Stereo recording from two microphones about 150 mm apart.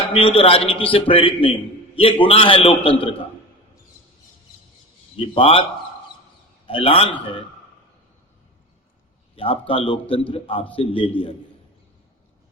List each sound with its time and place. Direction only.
0.1 s a man's voice: 35° left (ahead or behind)
5.1 s a man's voice: 35° left (ahead or behind)
6.7 s a man's voice: 40° left (ahead or behind)
9.3 s a man's voice: 40° left (ahead or behind)